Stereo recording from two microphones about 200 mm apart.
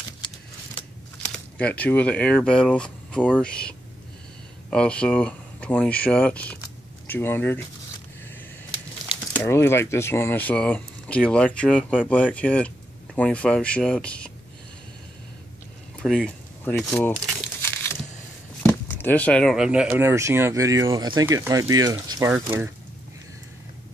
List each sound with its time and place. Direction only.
1.3 s speech: 5° left (ahead or behind)
9.3 s speech: 10° left (ahead or behind)
16.0 s speech: centre (ahead or behind)
17.6 s crushing: 10° left (ahead or behind)
18.6 s speech: 10° left (ahead or behind); by 22.7 s 10° right (ahead or behind)